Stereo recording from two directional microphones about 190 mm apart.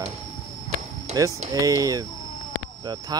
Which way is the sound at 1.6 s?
20° right (ahead or behind).